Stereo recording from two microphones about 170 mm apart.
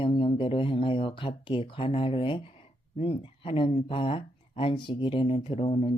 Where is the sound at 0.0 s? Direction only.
30° left (ahead or behind).